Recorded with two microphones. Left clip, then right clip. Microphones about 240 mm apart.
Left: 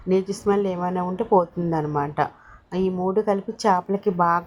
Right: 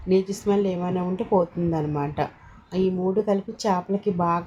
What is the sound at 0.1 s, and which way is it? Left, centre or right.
Speech, left.